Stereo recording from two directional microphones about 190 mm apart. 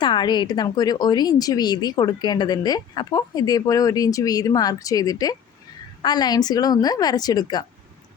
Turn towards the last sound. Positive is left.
turn(degrees=20)  # may be behind; listen again after turning